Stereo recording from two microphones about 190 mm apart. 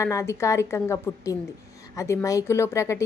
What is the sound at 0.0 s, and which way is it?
A woman's voice, 15° left (ahead or behind).